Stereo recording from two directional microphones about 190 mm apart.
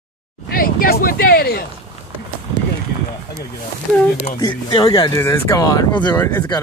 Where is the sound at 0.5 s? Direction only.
50° left (ahead or behind).